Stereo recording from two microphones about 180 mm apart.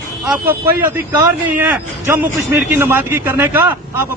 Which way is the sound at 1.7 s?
10° right (ahead or behind).